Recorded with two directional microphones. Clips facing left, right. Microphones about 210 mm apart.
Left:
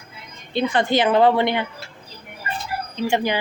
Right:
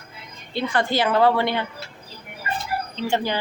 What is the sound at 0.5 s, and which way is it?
Speech, 20° left (ahead or behind).